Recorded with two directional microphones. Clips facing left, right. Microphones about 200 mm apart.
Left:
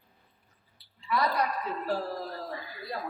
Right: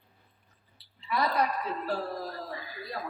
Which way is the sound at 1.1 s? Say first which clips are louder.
Left 1 dB; 20° right (ahead or behind).